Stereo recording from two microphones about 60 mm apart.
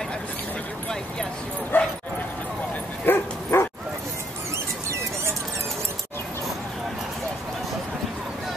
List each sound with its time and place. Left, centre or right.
1.7 s bow-wow: left
3.1 s bow-wow: left